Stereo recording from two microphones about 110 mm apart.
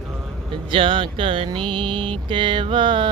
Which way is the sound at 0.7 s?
50° right (ahead or behind).